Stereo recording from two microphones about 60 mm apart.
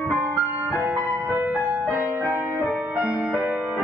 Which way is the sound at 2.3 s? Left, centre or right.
Right.